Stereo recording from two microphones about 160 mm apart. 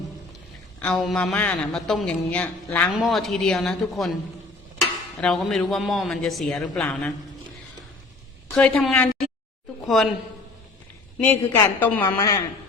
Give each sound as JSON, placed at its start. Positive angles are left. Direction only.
{"t": 0.8, "sound": "speech", "side_deg": 5}
{"t": 8.5, "sound": "a man's voice", "side_deg": 5}
{"t": 11.2, "sound": "speech", "side_deg": 15}